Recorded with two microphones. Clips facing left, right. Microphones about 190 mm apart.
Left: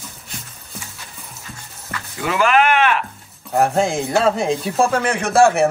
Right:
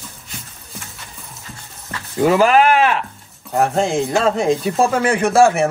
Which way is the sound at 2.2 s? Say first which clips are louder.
Right 4 dB; 40° right (ahead or behind).